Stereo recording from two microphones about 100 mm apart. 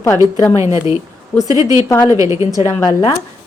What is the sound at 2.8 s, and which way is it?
Speech, 55° left (ahead or behind).